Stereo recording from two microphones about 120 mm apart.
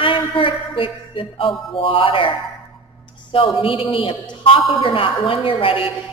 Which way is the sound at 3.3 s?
45° left (ahead or behind).